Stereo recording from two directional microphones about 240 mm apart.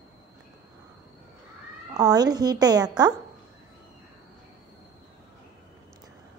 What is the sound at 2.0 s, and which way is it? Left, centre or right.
Speech, centre.